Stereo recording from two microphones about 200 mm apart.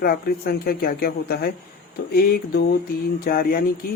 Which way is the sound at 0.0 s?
50° left (ahead or behind).